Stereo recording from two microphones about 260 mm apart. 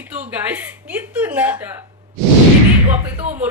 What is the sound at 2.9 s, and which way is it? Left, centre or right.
Speech, right.